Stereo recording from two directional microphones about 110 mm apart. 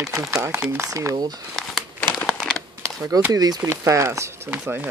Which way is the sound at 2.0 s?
15° left (ahead or behind).